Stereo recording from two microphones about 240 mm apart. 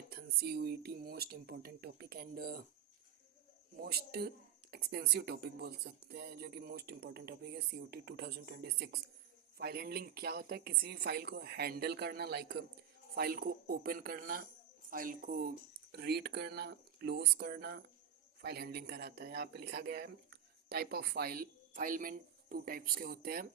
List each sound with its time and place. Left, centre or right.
0.1 s speech: right
3.8 s speech: right